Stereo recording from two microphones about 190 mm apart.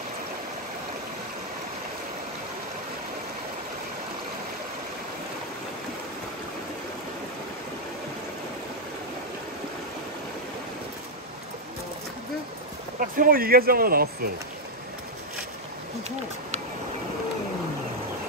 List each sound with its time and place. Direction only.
13.0 s speech: 45° right (ahead or behind)